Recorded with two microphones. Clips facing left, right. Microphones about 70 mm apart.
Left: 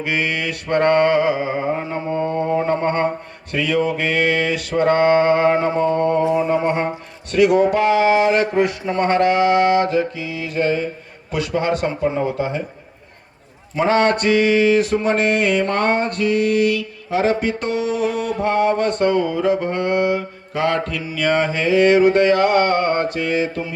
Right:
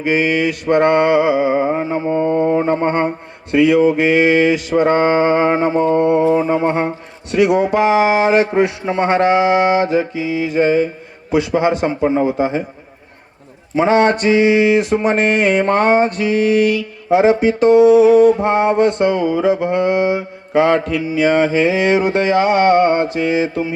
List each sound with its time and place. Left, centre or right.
0.0 s speech: centre
3.5 s a sound: centre
4.8 s speech: centre
6.3 s a sound: right
6.8 s speech: centre
13.7 s speech: centre
16.0 s mantra: left
17.1 s speech: centre
20.6 s a sound: right
21.2 s speech: centre